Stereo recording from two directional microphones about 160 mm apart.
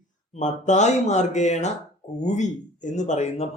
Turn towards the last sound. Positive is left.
turn(degrees=45)  # may be behind; listen again after turning